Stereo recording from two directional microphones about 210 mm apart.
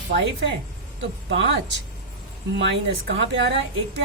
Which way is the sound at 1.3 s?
60° right (ahead or behind).